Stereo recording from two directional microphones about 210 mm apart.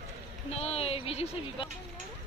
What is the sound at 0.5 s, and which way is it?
A woman's voice, 30° left (ahead or behind).